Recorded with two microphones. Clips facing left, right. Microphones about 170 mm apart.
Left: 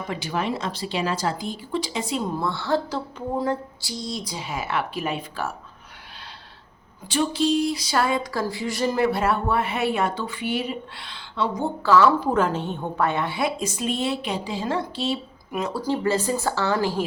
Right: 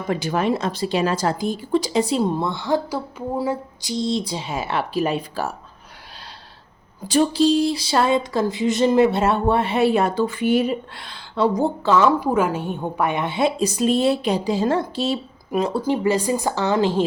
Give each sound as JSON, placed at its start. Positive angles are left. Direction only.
{"t": 0.1, "sound": "speech", "side_deg": -45}
{"t": 2.4, "sound": "speech", "side_deg": -15}
{"t": 3.8, "sound": "speech", "side_deg": -25}
{"t": 7.1, "sound": "a sound", "side_deg": -35}
{"t": 11.8, "sound": "speech", "side_deg": -20}
{"t": 13.6, "sound": "a sound", "side_deg": -35}
{"t": 15.7, "sound": "speech", "side_deg": -20}